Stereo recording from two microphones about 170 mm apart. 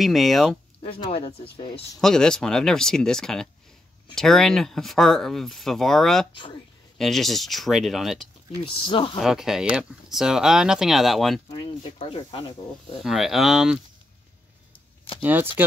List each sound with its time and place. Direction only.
0.0 s speech: centre (ahead or behind)
0.8 s speech: 30° left (ahead or behind)
2.0 s speech: 5° left (ahead or behind)
8.8 s speech: 30° left (ahead or behind)
9.2 s speech: centre (ahead or behind)
11.4 s speech: 30° left (ahead or behind)
13.0 s speech: centre (ahead or behind)
14.7 s a sound: 30° left (ahead or behind)
15.2 s speech: 10° right (ahead or behind)